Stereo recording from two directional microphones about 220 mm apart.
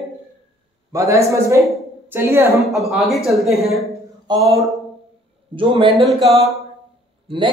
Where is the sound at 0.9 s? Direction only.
15° right (ahead or behind).